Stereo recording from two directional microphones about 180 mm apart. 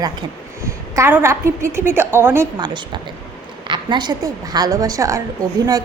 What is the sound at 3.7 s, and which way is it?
A woman's voice, 25° right (ahead or behind).